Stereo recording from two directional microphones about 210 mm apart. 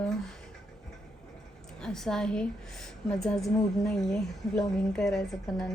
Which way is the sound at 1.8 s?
5° left (ahead or behind).